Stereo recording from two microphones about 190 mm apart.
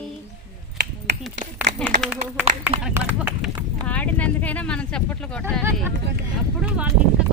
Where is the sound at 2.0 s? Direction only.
5° right (ahead or behind).